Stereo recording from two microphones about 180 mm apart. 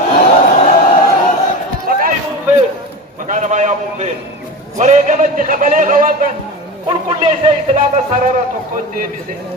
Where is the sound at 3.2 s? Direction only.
45° right (ahead or behind).